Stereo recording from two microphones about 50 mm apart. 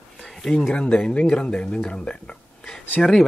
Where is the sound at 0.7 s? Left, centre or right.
Left.